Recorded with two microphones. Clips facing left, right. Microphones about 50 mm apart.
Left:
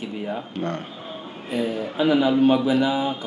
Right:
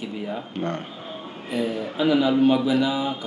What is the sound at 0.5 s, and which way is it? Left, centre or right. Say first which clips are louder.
Speech: right 1 dB; centre.